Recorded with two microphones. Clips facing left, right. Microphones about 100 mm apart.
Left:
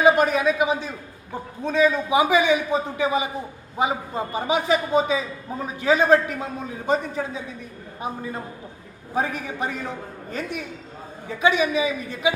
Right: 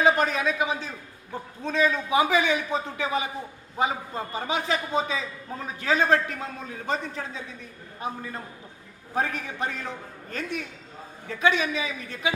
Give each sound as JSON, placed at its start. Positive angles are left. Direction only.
{"t": 0.0, "sound": "a man's voice", "side_deg": 10}